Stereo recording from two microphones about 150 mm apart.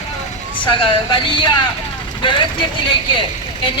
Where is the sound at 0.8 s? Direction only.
35° left (ahead or behind).